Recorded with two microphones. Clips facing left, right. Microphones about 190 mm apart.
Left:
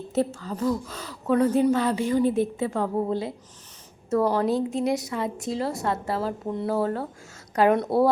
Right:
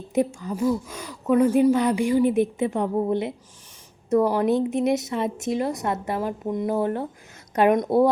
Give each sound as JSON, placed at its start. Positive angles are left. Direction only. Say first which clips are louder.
{"t": 0.1, "sound": "a woman's voice", "louder": "right 3 dB", "side_deg": -15}